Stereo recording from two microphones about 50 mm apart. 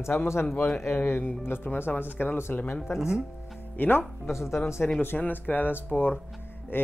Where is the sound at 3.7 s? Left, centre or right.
Left.